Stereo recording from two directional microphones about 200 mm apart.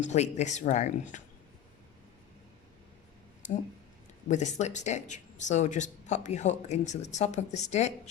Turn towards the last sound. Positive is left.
turn(degrees=35)  # may be behind; listen again after turning